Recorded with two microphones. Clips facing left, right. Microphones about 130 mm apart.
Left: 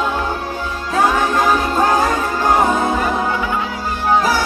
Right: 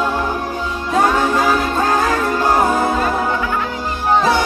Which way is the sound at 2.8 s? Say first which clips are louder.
Right 1 dB; 15° left (ahead or behind).